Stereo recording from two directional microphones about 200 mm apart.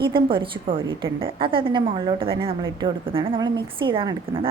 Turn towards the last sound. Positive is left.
turn(degrees=-25)  # may be behind; listen again after turning